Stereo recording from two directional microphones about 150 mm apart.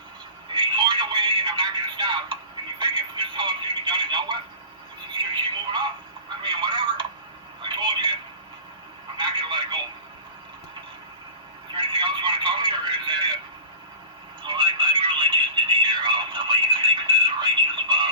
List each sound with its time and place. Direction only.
0.4 s telephone: 35° right (ahead or behind)
5.1 s speech: 35° right (ahead or behind)
11.7 s speech: 30° right (ahead or behind)
14.4 s speech: 30° right (ahead or behind)